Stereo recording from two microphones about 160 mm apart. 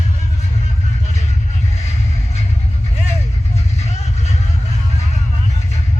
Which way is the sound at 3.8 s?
45° left (ahead or behind).